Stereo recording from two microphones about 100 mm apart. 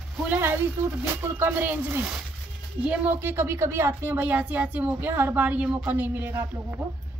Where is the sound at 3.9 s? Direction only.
15° right (ahead or behind).